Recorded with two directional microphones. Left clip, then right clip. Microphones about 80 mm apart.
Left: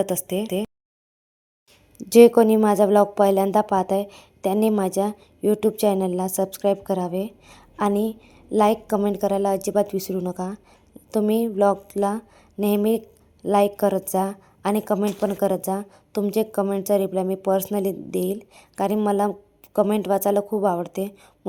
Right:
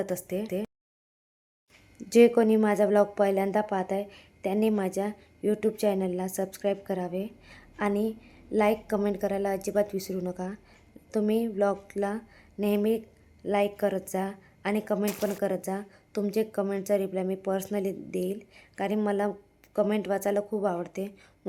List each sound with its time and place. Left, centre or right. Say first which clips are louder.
0.0 s a woman's voice: left 7 dB; left
2.0 s a woman's voice: left 7 dB; left
10.2 s a sound: left 6 dB; left
11.3 s a woman's voice: left 7 dB; left